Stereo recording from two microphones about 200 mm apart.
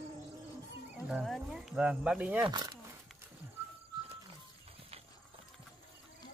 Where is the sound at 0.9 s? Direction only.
5° right (ahead or behind).